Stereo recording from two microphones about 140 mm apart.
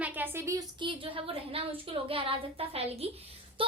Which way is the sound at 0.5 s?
35° right (ahead or behind).